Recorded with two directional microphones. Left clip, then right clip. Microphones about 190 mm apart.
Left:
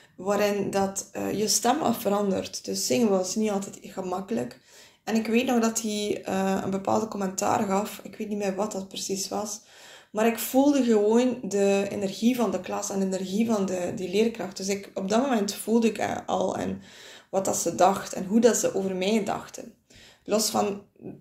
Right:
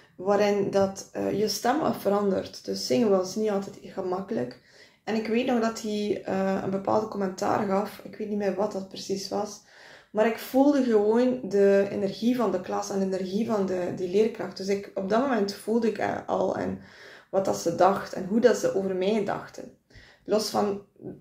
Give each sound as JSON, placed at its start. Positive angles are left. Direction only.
{"t": 0.2, "sound": "speech", "side_deg": 25}